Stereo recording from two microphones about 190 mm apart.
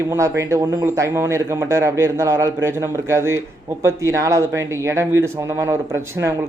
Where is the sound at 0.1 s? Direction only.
15° right (ahead or behind).